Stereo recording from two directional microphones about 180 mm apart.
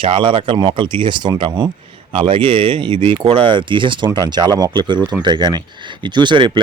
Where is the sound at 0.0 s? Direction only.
25° right (ahead or behind).